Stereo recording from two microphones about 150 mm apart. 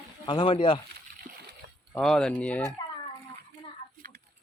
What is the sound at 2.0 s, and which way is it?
Speech, 5° left (ahead or behind).